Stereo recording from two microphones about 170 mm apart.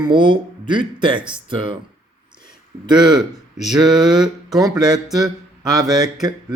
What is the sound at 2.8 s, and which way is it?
Speech, 25° right (ahead or behind).